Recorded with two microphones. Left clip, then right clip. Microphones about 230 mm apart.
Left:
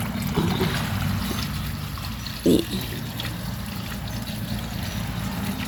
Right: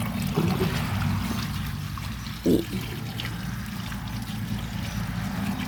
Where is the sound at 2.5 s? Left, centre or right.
Centre.